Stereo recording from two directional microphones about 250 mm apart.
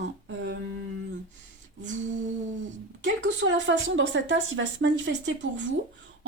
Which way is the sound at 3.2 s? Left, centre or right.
Right.